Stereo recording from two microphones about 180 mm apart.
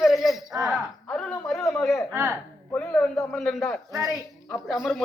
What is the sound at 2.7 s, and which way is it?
A man's voice, 5° left (ahead or behind).